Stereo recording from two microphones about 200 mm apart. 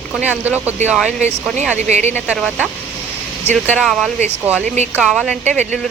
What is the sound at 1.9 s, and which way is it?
Speech, 35° right (ahead or behind).